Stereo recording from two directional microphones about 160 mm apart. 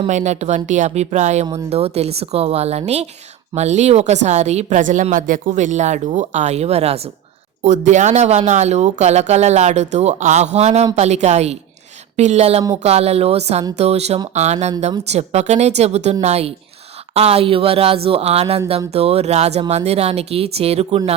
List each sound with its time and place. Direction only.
0.1 s speech: 45° right (ahead or behind)